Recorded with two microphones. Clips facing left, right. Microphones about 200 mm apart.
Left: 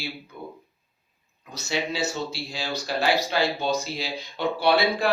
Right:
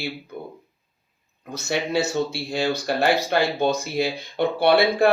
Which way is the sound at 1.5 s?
55° right (ahead or behind).